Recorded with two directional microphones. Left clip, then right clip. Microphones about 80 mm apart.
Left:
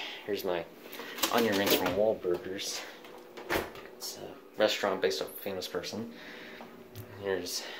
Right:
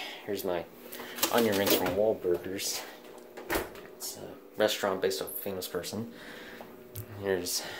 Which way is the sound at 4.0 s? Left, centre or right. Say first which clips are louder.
Even; right.